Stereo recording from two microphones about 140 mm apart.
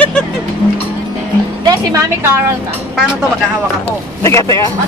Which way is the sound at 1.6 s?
30° right (ahead or behind).